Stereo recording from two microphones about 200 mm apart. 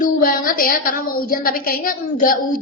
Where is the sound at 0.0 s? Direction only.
45° left (ahead or behind).